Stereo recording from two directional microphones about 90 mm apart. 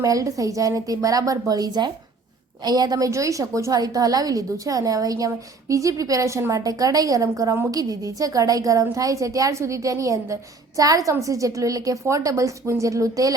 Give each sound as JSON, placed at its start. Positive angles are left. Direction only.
{"t": 0.0, "sound": "a woman's voice", "side_deg": -40}